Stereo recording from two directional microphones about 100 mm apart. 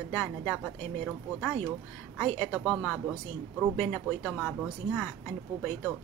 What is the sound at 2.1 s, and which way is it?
Speech, 5° left (ahead or behind).